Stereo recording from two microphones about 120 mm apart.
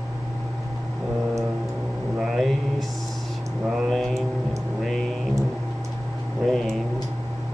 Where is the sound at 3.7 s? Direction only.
Centre (ahead or behind).